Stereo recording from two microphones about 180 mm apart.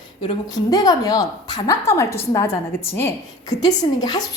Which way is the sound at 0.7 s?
20° left (ahead or behind).